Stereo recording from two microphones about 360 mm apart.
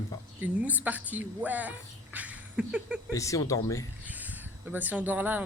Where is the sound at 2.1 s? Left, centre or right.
Centre.